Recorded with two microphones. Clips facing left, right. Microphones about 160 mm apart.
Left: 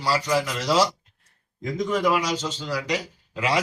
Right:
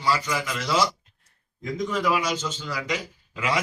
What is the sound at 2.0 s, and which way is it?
Speech, 35° left (ahead or behind).